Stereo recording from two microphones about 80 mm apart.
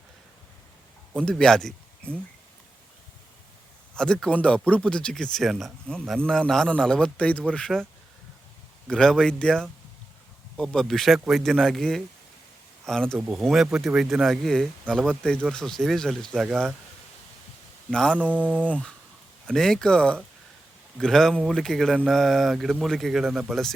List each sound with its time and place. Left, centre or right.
1.1 s speech: centre
3.9 s speech: centre
8.9 s speech: centre
13.1 s speech: centre
17.9 s speech: centre
18.2 s mantra: centre
19.5 s speech: centre